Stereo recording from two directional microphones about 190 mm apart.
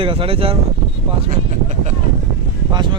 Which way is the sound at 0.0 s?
30° right (ahead or behind).